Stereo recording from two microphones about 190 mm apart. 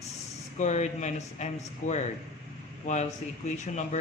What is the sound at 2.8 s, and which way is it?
Speech, 35° left (ahead or behind).